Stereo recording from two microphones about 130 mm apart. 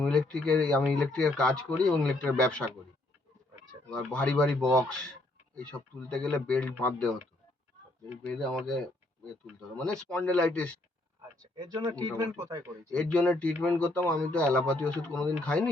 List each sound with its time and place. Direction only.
0.0 s speech: 5° left (ahead or behind)
3.8 s speech: 10° left (ahead or behind)
8.2 s speech: 5° left (ahead or behind)
11.5 s speech: 35° right (ahead or behind)
12.9 s speech: 10° left (ahead or behind)